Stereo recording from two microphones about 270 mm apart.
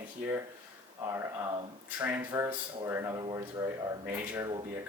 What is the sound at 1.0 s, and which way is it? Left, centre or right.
Speech, centre.